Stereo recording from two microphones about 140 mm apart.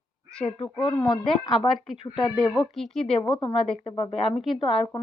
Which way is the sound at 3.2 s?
35° left (ahead or behind).